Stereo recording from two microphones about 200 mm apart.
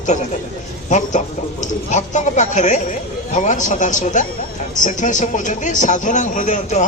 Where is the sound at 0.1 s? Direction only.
35° left (ahead or behind).